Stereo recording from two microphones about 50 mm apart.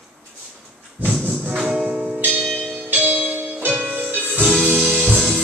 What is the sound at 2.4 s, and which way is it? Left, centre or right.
Church bell, centre.